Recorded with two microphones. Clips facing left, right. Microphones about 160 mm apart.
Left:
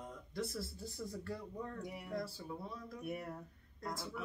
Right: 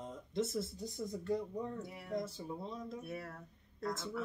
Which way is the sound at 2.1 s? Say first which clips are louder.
Right 4 dB; 20° right (ahead or behind).